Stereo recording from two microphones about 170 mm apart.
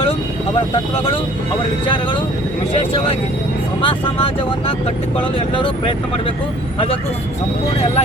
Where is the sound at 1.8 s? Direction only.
30° left (ahead or behind).